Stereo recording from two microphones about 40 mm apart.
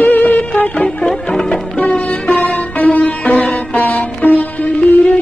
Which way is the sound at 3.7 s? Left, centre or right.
Left.